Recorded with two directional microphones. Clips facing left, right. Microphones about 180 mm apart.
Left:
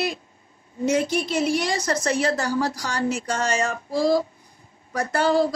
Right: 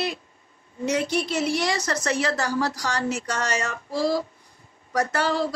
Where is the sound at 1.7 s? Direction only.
30° left (ahead or behind).